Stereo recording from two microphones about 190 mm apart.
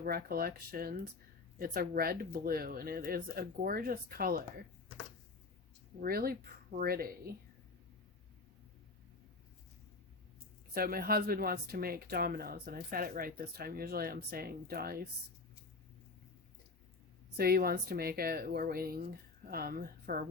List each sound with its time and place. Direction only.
0.0 s speech: 50° right (ahead or behind)
6.0 s speech: 50° right (ahead or behind)
10.8 s speech: 50° right (ahead or behind)
17.3 s speech: 55° right (ahead or behind)